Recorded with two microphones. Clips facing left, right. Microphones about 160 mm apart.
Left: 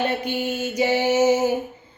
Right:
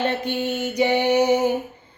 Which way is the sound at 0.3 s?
10° left (ahead or behind).